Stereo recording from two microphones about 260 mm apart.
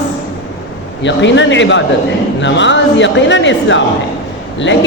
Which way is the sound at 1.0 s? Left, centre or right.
Left.